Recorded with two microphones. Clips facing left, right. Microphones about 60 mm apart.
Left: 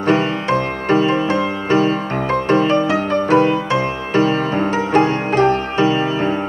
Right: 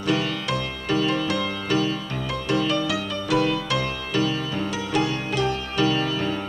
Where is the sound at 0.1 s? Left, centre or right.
Left.